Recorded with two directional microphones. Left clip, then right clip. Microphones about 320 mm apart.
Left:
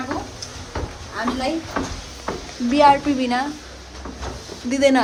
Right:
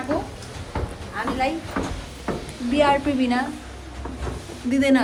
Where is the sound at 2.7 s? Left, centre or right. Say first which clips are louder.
Left 5 dB; centre.